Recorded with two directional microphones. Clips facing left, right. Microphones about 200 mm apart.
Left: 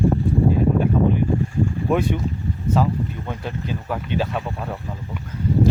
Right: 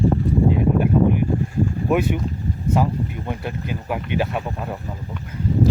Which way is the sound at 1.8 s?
5° right (ahead or behind).